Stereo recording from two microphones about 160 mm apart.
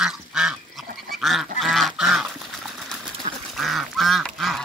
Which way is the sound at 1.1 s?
Centre (ahead or behind).